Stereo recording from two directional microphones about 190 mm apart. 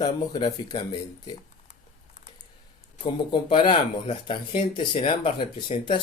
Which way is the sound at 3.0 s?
25° left (ahead or behind).